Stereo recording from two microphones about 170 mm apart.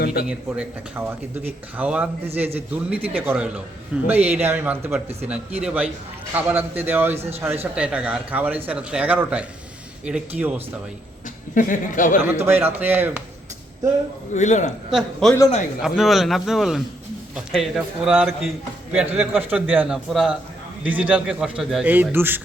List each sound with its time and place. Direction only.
0.0 s a sound: 65° left (ahead or behind)
0.3 s speech: 10° right (ahead or behind)
11.5 s speech: 50° left (ahead or behind)
12.2 s speech: 15° right (ahead or behind)
14.3 s speech: 45° left (ahead or behind)
14.8 s a man's voice: centre (ahead or behind)